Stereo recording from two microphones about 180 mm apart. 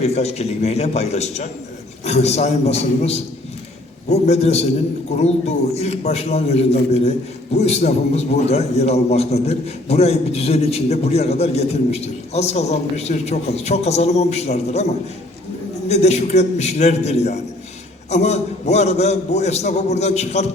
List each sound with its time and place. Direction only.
0.0 s a man's voice: 35° left (ahead or behind)